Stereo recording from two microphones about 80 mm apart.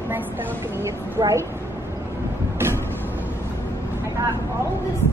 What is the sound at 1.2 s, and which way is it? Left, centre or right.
Speech, right.